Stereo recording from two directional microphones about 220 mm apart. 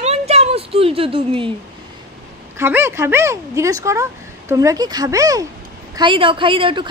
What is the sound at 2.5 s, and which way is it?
A woman's voice, 10° right (ahead or behind).